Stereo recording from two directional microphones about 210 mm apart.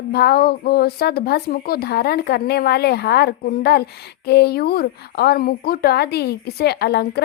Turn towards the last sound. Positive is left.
turn(degrees=50)  # may be behind; listen again after turning